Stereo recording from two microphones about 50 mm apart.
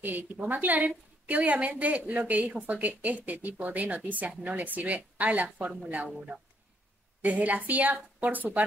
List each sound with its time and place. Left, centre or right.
0.0 s a woman's voice: right
7.2 s a woman's voice: right